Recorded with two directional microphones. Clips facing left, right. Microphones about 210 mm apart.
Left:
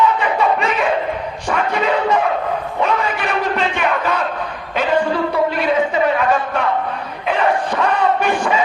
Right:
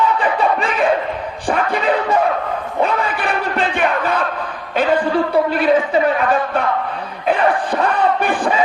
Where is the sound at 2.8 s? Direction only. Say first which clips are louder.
Right 1 dB; 35° right (ahead or behind).